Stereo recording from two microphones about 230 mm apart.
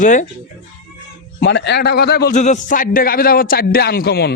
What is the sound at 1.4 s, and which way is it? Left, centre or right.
Speech, left.